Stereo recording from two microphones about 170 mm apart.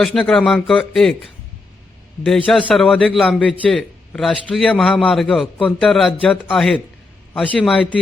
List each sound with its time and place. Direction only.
0.0 s a man's voice: 5° left (ahead or behind)
2.5 s a man's voice: 5° left (ahead or behind)